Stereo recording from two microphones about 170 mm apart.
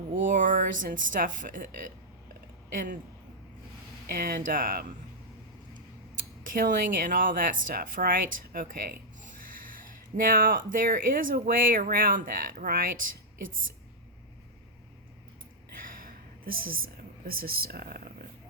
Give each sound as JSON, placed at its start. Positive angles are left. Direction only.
{"t": 0.3, "sound": "speech", "side_deg": -50}
{"t": 4.1, "sound": "speech", "side_deg": -60}
{"t": 6.4, "sound": "speech", "side_deg": -50}
{"t": 15.8, "sound": "a sound", "side_deg": -55}